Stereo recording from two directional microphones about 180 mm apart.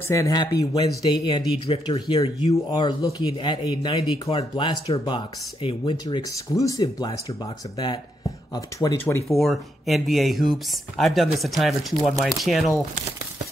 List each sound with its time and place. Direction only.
0.1 s speech: 20° left (ahead or behind)
8.5 s speech: 20° left (ahead or behind)
9.3 s speech: centre (ahead or behind)